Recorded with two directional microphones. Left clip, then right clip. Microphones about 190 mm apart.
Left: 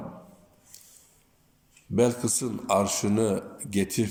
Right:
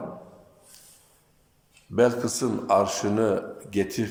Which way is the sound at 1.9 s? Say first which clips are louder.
Right 3 dB; 20° left (ahead or behind).